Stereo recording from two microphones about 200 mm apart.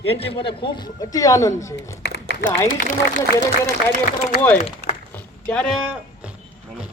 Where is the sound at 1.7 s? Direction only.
55° left (ahead or behind).